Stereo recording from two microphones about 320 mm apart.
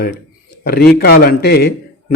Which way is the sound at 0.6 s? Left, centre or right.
Left.